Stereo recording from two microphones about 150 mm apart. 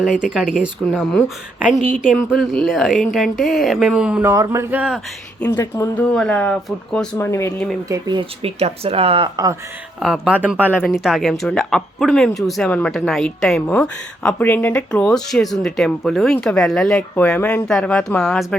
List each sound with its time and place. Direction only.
0.0 s a woman's voice: 5° right (ahead or behind)
1.5 s a sound: 10° right (ahead or behind)
2.3 s a woman's voice: centre (ahead or behind)
4.3 s a sound: 20° right (ahead or behind)
5.4 s speech: 15° left (ahead or behind)
7.3 s speech: 15° left (ahead or behind)
7.9 s speech: 25° right (ahead or behind)
10.0 s a woman's voice: 5° right (ahead or behind)
10.6 s speech: 10° left (ahead or behind)
10.9 s a woman's voice: 5° right (ahead or behind)